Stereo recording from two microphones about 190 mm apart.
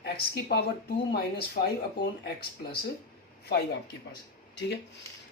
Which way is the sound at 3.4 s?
60° left (ahead or behind).